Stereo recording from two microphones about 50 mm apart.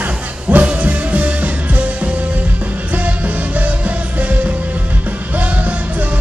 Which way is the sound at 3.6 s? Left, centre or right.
Right.